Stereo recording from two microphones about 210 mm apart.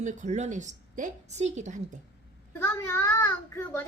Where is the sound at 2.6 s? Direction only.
10° left (ahead or behind).